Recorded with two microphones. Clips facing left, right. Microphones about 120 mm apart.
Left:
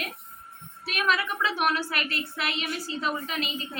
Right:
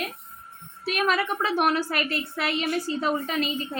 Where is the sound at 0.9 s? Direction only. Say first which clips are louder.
Right 2 dB; 40° right (ahead or behind).